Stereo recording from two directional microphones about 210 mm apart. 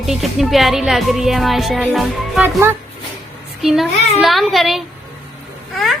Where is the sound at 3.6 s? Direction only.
Centre (ahead or behind).